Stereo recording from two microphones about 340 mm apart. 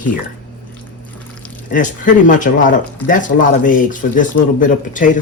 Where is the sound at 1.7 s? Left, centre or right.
Left.